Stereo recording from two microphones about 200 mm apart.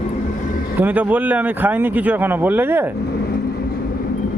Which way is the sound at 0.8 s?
10° right (ahead or behind).